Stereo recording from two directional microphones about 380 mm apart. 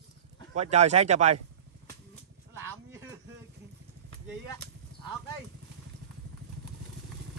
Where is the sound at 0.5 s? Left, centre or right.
Centre.